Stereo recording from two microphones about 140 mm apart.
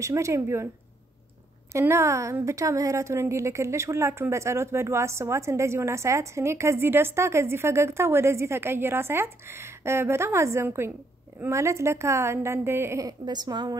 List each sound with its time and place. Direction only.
0.0 s a woman's voice: 20° right (ahead or behind)
1.7 s a woman's voice: 20° right (ahead or behind)